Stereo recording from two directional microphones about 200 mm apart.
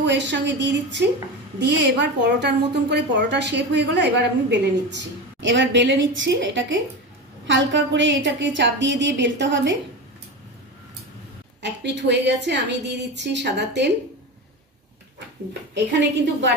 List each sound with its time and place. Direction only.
0.0 s a woman's voice: 60° right (ahead or behind)
11.6 s a woman's voice: 60° right (ahead or behind)
15.7 s a woman's voice: 60° right (ahead or behind)